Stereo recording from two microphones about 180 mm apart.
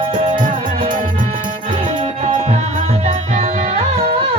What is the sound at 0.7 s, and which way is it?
Music, 50° right (ahead or behind).